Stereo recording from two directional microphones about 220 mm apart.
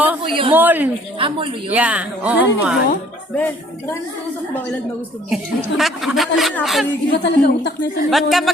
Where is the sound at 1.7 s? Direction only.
5° right (ahead or behind).